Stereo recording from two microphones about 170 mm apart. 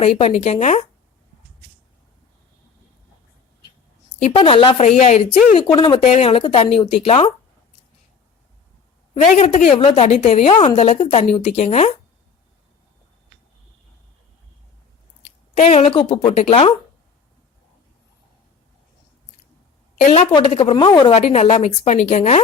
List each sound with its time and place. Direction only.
0.0 s a woman's voice: 35° left (ahead or behind)
4.3 s a woman's voice: 30° left (ahead or behind)
4.9 s speech: 45° left (ahead or behind)
5.5 s a woman's voice: 30° left (ahead or behind)
9.2 s a woman's voice: 45° left (ahead or behind)
15.5 s a woman's voice: 40° left (ahead or behind)
20.3 s a woman's voice: 30° left (ahead or behind)
21.2 s a woman's voice: 40° left (ahead or behind)